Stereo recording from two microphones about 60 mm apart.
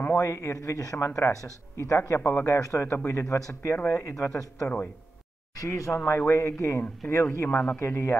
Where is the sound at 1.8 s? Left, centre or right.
Left.